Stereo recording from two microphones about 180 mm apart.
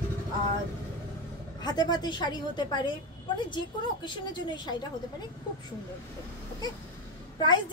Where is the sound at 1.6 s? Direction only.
25° left (ahead or behind).